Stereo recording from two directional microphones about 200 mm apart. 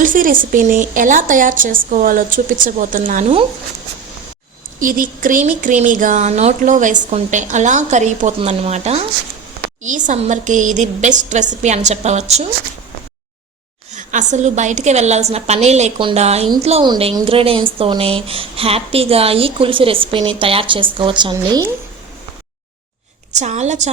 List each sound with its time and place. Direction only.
0.0 s a woman's voice: 45° right (ahead or behind)
4.8 s a woman's voice: 45° right (ahead or behind)
13.9 s a woman's voice: 40° right (ahead or behind); by 21.7 s 20° right (ahead or behind)
23.4 s a woman's voice: 35° right (ahead or behind)